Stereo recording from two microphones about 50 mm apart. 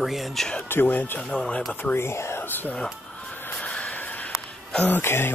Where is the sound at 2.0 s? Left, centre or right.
Left.